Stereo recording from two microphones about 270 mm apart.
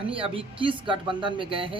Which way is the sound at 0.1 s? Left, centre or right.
Centre.